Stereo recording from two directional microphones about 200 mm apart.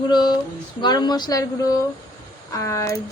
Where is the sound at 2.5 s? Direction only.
15° left (ahead or behind).